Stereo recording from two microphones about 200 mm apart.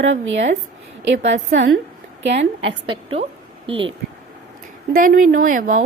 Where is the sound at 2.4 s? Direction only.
30° right (ahead or behind).